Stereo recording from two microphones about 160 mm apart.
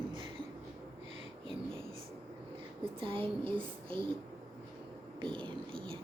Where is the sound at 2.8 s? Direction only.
35° right (ahead or behind).